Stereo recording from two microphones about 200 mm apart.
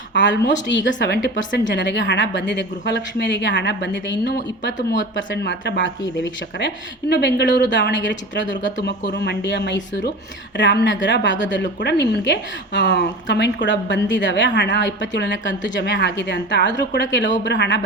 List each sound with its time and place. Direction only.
0.1 s a woman's voice: 60° left (ahead or behind)